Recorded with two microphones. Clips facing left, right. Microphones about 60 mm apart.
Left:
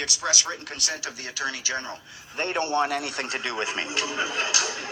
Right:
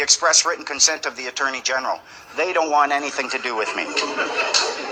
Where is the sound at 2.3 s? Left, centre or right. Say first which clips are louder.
Right 7 dB; right.